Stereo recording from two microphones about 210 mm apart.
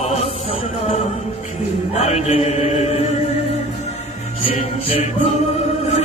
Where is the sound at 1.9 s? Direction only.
30° left (ahead or behind).